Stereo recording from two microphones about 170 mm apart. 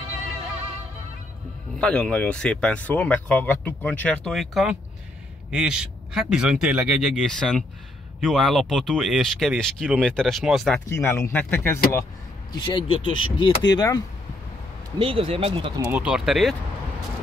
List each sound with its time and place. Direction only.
1.8 s a man's voice: 5° left (ahead or behind)
10.9 s speech: 15° left (ahead or behind)
12.5 s speech: 30° left (ahead or behind)
15.0 s speech: 30° right (ahead or behind)
15.9 s a man's voice: 5° right (ahead or behind)